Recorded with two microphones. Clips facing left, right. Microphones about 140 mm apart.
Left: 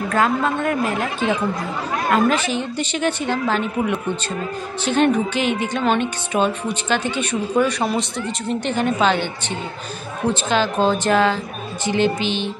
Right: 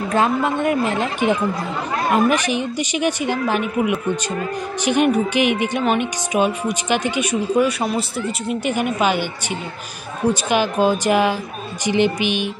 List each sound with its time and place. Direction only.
0.1 s a woman's voice: 20° right (ahead or behind)
10.3 s speech: 15° right (ahead or behind)